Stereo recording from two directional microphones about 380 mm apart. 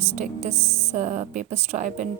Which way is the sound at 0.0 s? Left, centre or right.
Centre.